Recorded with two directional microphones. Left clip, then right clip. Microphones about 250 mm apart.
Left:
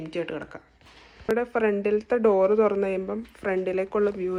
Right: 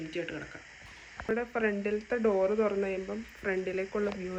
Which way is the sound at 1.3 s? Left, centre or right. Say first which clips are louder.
Left 7 dB; centre.